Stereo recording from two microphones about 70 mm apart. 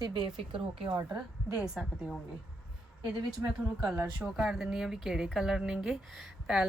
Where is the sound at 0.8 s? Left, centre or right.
Right.